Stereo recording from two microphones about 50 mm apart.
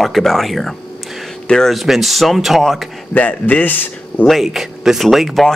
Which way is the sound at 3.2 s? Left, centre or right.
Left.